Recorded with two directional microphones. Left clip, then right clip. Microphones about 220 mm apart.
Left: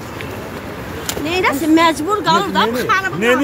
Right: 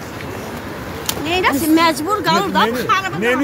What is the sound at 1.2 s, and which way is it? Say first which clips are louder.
Speech: even; 15° right (ahead or behind).